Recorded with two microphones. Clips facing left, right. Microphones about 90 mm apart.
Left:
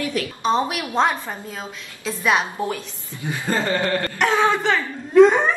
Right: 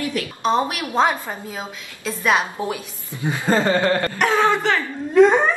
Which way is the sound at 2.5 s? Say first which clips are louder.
Even; 15° right (ahead or behind).